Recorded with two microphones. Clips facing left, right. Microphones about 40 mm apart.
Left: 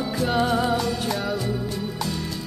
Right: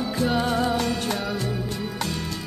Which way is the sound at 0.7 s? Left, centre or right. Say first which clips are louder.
Even; right.